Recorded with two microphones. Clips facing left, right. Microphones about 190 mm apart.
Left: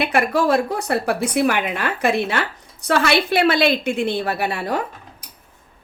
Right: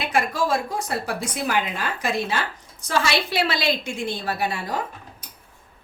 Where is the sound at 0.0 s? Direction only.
65° left (ahead or behind).